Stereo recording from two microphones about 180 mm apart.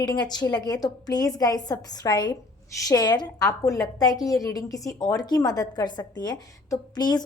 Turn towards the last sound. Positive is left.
turn(degrees=25)  # may be behind; listen again after turning